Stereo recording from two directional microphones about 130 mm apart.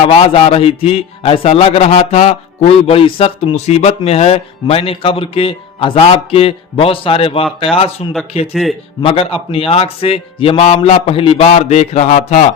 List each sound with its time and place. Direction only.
0.1 s a man's voice: 45° left (ahead or behind); by 12.4 s 65° left (ahead or behind)